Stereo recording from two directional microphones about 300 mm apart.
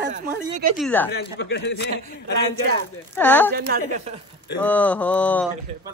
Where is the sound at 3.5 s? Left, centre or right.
Right.